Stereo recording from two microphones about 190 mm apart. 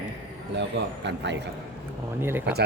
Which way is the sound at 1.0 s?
65° right (ahead or behind).